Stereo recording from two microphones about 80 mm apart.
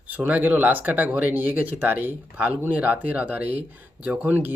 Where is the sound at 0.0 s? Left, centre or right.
Right.